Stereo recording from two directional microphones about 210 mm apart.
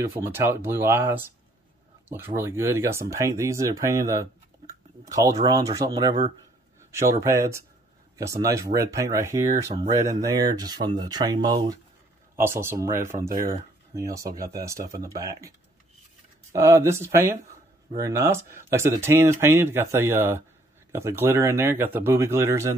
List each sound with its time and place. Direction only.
0.0 s speech: 10° right (ahead or behind)
6.9 s speech: 15° right (ahead or behind)
9.6 s speech: 30° right (ahead or behind)
10.0 s speech: 15° right (ahead or behind)
16.5 s speech: 15° right (ahead or behind)